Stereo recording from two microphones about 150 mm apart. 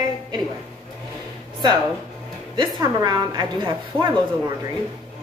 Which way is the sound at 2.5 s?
30° right (ahead or behind).